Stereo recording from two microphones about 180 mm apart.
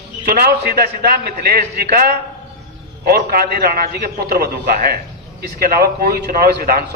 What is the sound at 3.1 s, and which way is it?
A man's voice, 55° right (ahead or behind).